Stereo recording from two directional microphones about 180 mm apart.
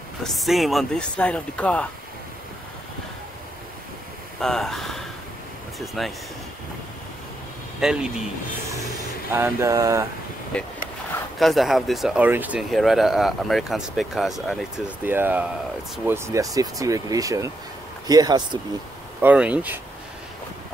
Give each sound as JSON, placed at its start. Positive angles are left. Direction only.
{"t": 0.2, "sound": "speech", "side_deg": 0}
{"t": 4.4, "sound": "speech", "side_deg": 0}
{"t": 7.8, "sound": "speech", "side_deg": -5}
{"t": 9.3, "sound": "speech", "side_deg": -15}
{"t": 10.5, "sound": "speech", "side_deg": 5}
{"t": 19.2, "sound": "speech", "side_deg": -5}